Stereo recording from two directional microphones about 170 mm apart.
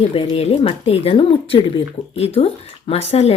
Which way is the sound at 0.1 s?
35° left (ahead or behind).